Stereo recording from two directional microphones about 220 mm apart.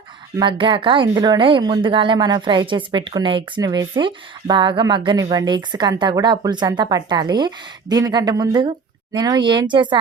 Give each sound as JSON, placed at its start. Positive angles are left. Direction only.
{"t": 0.3, "sound": "speech", "side_deg": -20}